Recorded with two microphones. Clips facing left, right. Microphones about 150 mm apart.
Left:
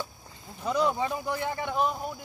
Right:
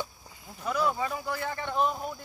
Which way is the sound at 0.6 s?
20° left (ahead or behind).